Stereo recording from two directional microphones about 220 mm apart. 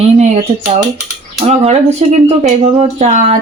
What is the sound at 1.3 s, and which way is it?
Speech, 25° right (ahead or behind).